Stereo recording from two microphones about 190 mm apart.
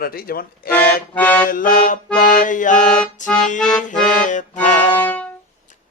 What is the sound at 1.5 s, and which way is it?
Music, 45° left (ahead or behind).